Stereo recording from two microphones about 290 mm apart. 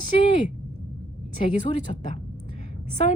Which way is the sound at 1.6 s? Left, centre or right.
Left.